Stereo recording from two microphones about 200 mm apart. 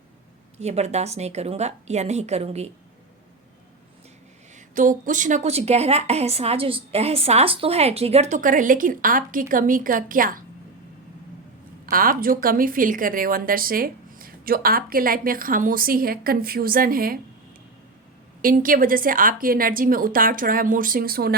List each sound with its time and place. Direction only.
0.6 s a woman's voice: 35° right (ahead or behind)
4.7 s a woman's voice: 40° right (ahead or behind)
11.9 s a woman's voice: 45° right (ahead or behind)
18.4 s a woman's voice: 45° right (ahead or behind)